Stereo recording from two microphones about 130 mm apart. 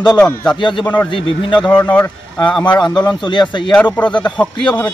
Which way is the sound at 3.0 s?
35° left (ahead or behind).